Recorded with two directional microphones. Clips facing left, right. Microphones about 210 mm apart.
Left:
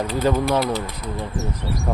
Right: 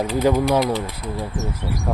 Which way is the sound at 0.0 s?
10° right (ahead or behind).